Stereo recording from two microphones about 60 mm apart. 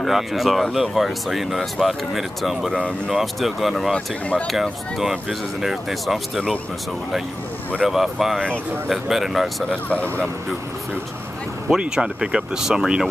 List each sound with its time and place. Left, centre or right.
0.0 s speech: centre
3.9 s speech: left
4.5 s speech: centre
7.8 s speech: centre
9.7 s speech: left
11.7 s speech: centre